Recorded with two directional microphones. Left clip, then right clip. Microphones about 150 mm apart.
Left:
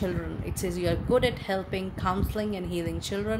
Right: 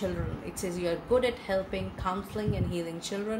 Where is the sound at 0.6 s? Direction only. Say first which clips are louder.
Left 2 dB; 75° left (ahead or behind).